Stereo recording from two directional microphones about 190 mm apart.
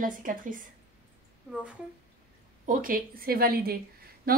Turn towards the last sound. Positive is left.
turn(degrees=-50)  # may be behind; listen again after turning